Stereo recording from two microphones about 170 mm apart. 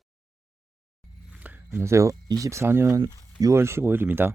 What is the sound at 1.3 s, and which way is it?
Speech, 10° right (ahead or behind).